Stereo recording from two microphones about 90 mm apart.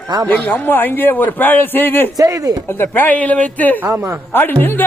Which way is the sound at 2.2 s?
40° right (ahead or behind).